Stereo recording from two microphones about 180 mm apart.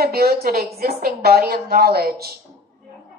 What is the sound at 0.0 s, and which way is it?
A woman's voice, 60° right (ahead or behind).